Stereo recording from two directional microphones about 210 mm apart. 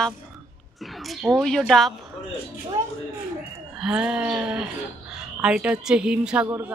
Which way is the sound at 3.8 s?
5° right (ahead or behind).